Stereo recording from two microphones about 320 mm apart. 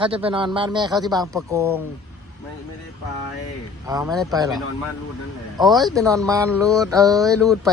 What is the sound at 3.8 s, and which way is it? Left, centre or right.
Speech, centre.